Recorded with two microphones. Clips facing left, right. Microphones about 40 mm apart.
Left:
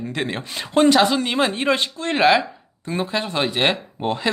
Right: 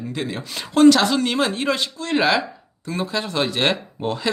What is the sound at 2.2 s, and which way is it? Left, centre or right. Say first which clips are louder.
Speech: left 6 dB; centre.